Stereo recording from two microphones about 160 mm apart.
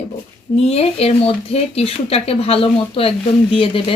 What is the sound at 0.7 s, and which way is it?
Speech, 40° left (ahead or behind).